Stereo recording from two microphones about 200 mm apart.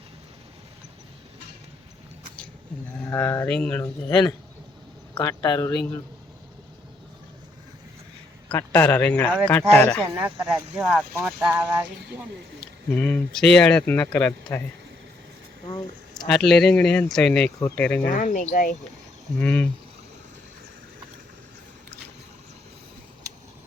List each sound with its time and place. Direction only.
3.1 s a man's voice: 10° left (ahead or behind)
4.1 s a man's voice: 20° left (ahead or behind)
8.4 s a man's voice: 10° left (ahead or behind)
10.1 s speech: 10° right (ahead or behind)
12.9 s speech: 5° left (ahead or behind)
16.2 s a man's voice: centre (ahead or behind)
18.1 s speech: 40° left (ahead or behind)
19.4 s a man's voice: 10° left (ahead or behind)